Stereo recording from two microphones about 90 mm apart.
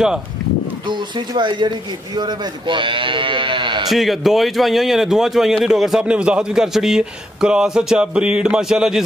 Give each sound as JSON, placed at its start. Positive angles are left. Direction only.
{"t": 0.8, "sound": "a man's voice", "side_deg": -55}
{"t": 3.9, "sound": "a man's voice", "side_deg": 0}